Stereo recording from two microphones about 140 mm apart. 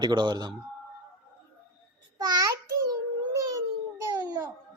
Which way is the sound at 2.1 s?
25° right (ahead or behind).